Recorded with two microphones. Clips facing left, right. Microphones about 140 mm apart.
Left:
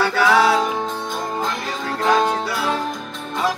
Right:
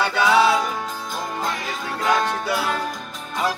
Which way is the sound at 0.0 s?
20° right (ahead or behind).